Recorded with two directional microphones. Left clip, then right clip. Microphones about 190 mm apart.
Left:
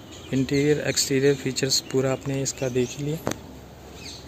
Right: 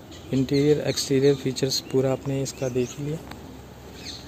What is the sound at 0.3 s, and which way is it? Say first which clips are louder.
Speech: right 1 dB; 10° right (ahead or behind).